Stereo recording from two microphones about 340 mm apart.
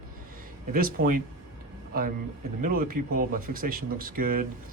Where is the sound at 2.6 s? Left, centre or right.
Right.